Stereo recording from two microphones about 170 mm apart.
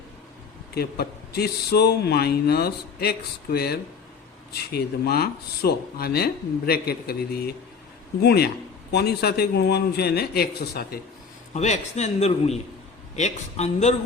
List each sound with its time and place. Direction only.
0.7 s speech: 70° left (ahead or behind)
11.5 s a man's voice: 40° left (ahead or behind)